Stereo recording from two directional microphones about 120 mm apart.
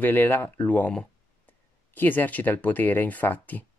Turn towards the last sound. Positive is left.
turn(degrees=15)  # may be behind; listen again after turning